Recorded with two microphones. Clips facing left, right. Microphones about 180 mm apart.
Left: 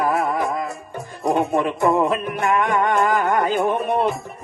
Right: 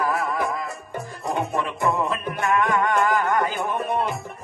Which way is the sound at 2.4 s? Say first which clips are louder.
Left 1 dB; 25° left (ahead or behind).